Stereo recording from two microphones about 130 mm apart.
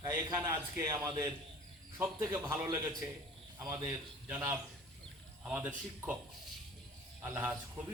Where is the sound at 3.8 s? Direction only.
15° right (ahead or behind).